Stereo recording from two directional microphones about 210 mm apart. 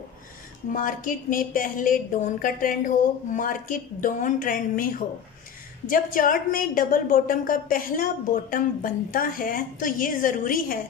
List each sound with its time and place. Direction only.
0.7 s a woman's voice: 40° left (ahead or behind)